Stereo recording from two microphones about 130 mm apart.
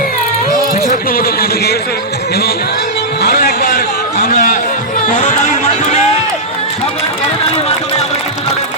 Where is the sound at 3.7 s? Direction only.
70° left (ahead or behind).